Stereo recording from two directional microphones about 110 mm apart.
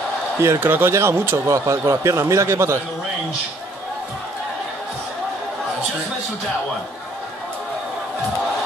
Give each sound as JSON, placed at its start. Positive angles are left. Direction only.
{"t": 0.4, "sound": "speech", "side_deg": -20}